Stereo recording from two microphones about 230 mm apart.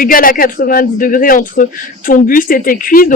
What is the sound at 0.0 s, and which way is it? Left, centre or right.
A man's voice, left.